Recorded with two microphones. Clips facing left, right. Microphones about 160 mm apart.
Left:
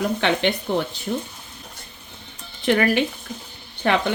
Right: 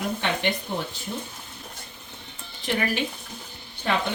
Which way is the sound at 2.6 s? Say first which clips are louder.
Left 7 dB; 60° left (ahead or behind).